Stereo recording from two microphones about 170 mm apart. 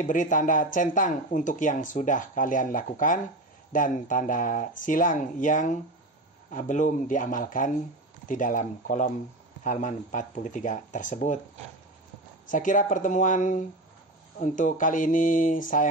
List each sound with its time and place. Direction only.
0.0 s speech: 50° left (ahead or behind)
12.4 s speech: 50° left (ahead or behind)